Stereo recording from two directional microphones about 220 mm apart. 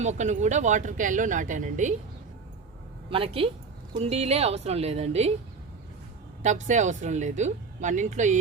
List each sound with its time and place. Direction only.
0.0 s speech: 30° right (ahead or behind)
3.1 s a woman's voice: 25° right (ahead or behind)
6.4 s speech: 35° right (ahead or behind)